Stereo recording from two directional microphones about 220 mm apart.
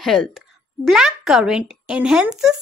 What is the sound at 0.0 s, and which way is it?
Speech, centre (ahead or behind).